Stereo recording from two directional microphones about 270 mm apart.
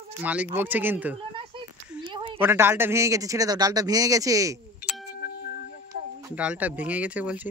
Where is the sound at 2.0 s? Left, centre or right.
Centre.